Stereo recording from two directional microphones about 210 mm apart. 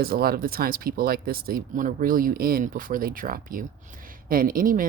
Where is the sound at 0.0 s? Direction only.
45° right (ahead or behind).